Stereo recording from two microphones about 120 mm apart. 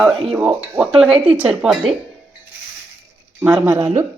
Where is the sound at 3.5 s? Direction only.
10° right (ahead or behind).